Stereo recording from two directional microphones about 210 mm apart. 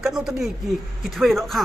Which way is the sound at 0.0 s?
Centre (ahead or behind).